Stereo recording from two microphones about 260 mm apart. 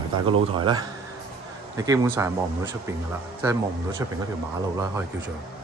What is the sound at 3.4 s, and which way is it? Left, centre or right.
Speech, centre.